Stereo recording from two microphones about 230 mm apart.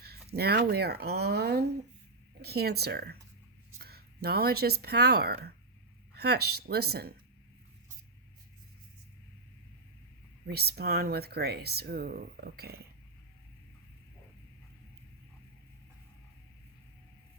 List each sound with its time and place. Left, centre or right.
0.0 s speech: right
10.4 s speech: right